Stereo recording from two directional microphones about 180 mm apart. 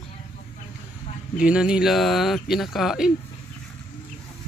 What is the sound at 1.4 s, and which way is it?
Speech, 5° right (ahead or behind).